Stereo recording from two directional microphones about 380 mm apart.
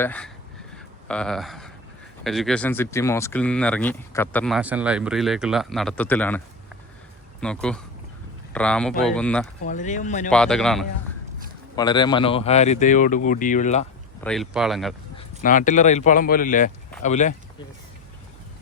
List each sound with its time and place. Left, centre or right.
0.0 s speech: centre
7.4 s speech: centre
9.6 s speech: centre
10.2 s speech: centre
14.3 s speech: centre
15.1 s speech: centre